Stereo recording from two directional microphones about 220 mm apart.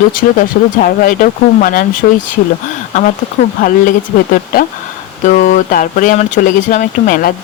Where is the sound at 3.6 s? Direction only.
40° left (ahead or behind).